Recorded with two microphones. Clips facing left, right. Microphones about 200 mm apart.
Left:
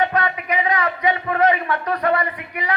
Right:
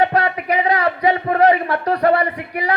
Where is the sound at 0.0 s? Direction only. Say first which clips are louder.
Right 4 dB; 35° right (ahead or behind).